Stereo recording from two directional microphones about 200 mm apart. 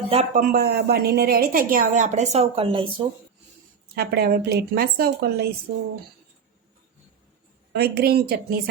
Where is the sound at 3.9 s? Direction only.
50° right (ahead or behind).